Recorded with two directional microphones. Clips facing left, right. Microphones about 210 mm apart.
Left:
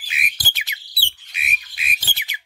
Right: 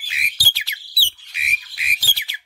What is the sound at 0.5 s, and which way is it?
Whistle, 20° left (ahead or behind).